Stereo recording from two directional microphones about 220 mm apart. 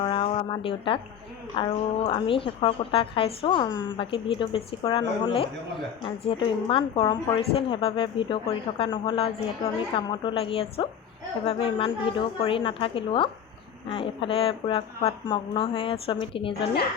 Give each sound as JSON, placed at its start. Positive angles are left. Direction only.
{"t": 0.0, "sound": "a woman's voice", "side_deg": 25}